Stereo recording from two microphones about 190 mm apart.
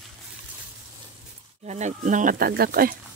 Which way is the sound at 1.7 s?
40° right (ahead or behind).